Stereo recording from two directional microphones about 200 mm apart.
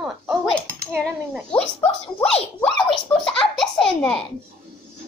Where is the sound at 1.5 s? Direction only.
10° left (ahead or behind).